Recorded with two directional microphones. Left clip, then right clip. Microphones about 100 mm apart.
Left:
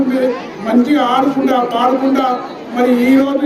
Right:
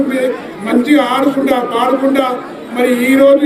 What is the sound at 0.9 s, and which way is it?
A man's voice, 35° left (ahead or behind).